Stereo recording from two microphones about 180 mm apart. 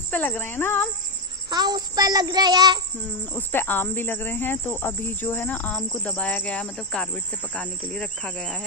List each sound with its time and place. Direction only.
0.1 s speech: 10° left (ahead or behind)
1.5 s child singing: 20° right (ahead or behind)
3.3 s speech: 10° left (ahead or behind)